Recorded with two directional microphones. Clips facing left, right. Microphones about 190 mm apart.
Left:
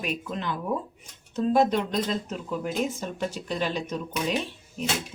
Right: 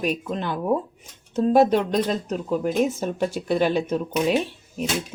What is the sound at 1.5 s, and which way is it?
Speech, 55° right (ahead or behind).